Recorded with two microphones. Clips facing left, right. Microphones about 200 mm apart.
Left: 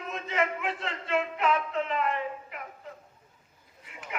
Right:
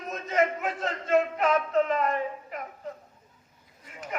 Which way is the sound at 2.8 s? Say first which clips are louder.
Right 6 dB; 40° right (ahead or behind).